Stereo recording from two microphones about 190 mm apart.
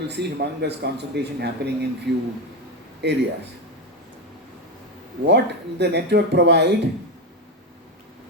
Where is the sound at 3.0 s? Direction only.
60° right (ahead or behind).